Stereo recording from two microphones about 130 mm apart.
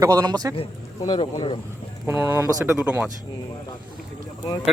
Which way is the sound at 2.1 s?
15° right (ahead or behind).